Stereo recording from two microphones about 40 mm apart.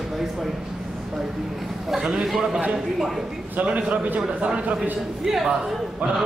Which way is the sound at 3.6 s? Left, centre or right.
Right.